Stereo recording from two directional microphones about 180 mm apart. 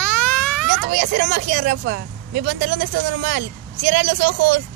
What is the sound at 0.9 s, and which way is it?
Speech, 45° right (ahead or behind).